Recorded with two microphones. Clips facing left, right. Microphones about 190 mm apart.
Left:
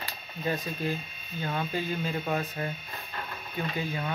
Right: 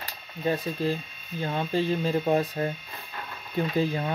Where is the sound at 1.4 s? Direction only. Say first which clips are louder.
Right 5 dB; 30° right (ahead or behind).